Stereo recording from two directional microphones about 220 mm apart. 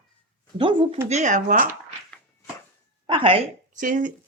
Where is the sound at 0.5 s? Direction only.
20° right (ahead or behind).